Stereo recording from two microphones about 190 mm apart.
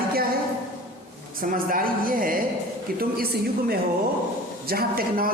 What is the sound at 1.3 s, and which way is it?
A woman's voice, 45° right (ahead or behind).